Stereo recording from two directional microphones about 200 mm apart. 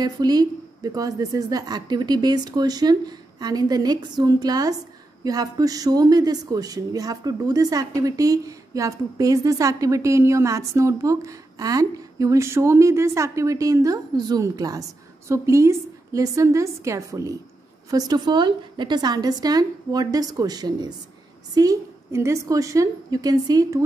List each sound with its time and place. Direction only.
0.0 s speech: 20° right (ahead or behind)